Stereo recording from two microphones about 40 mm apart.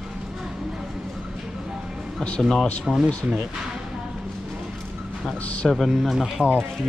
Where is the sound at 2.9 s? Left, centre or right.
Centre.